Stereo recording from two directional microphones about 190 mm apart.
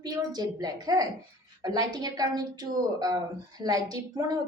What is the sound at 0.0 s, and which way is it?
A woman's voice, 20° right (ahead or behind).